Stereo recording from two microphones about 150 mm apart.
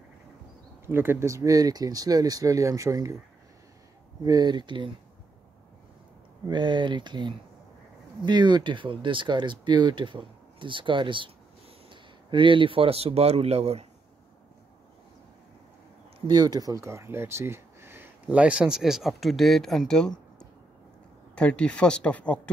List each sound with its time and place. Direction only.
0.8 s speech: 15° right (ahead or behind)
4.2 s speech: 25° right (ahead or behind)
6.4 s a man's voice: 30° right (ahead or behind)
16.3 s speech: 25° right (ahead or behind); by 20.2 s 5° left (ahead or behind)
21.4 s speech: 10° left (ahead or behind)